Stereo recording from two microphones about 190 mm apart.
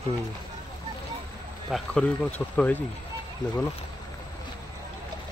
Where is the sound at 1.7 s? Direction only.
5° left (ahead or behind).